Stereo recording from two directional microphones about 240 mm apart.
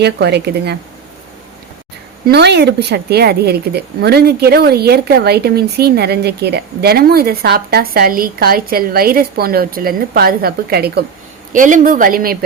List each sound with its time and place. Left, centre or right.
0.0 s speech: right
2.2 s speech: right